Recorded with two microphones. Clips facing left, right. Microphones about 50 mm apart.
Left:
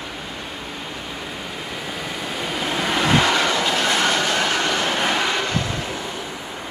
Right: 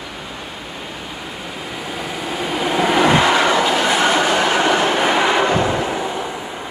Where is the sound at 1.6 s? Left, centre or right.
Centre.